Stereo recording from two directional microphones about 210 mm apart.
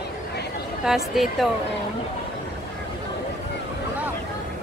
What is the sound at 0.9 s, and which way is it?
Speech, centre (ahead or behind).